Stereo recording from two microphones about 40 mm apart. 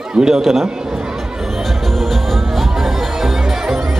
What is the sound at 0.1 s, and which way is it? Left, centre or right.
Speech, centre.